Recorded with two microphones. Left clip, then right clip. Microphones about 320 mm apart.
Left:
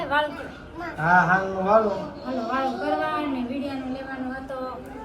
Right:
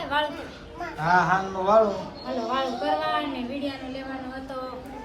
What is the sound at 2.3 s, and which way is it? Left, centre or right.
Speech, right.